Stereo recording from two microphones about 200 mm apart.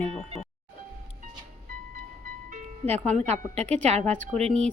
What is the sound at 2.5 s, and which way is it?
Music, 35° right (ahead or behind).